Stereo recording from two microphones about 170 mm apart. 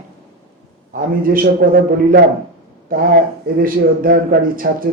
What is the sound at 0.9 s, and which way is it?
A man's voice, 55° right (ahead or behind).